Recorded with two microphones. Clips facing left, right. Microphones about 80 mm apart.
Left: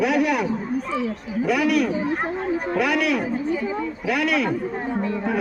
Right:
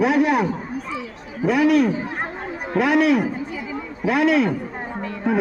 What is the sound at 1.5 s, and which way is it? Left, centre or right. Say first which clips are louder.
Speech: right 4 dB; right.